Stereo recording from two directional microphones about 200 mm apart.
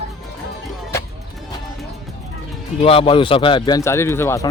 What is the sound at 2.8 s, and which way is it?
A man's voice, 25° left (ahead or behind).